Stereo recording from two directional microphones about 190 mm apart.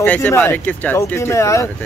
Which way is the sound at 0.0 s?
10° left (ahead or behind).